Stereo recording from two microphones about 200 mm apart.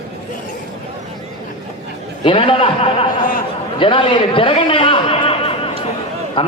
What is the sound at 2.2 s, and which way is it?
A man's voice, 25° left (ahead or behind).